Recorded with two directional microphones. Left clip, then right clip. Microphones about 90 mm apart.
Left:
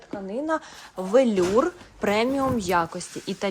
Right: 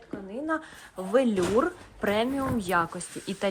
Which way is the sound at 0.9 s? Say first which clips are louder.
Left 5 dB; 35° left (ahead or behind).